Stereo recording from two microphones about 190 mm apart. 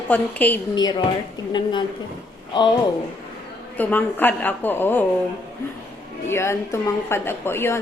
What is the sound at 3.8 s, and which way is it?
A woman's voice, 10° left (ahead or behind).